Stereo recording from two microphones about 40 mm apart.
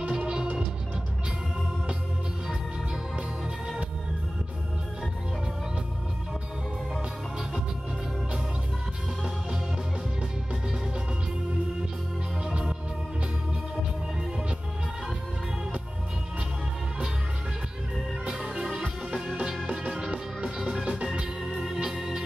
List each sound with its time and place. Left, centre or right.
0.1 s music: centre
18.2 s music: right
20.1 s music: right
21.0 s organ: right